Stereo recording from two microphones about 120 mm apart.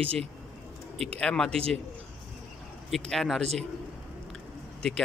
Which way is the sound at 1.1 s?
5° left (ahead or behind).